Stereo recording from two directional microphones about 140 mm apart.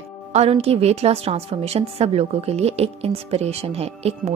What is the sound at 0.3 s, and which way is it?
A woman's voice, 50° right (ahead or behind).